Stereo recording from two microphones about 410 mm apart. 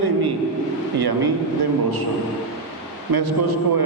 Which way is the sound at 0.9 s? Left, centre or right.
Right.